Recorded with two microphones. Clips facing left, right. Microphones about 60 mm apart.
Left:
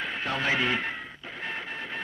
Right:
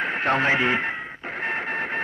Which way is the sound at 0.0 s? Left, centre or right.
Right.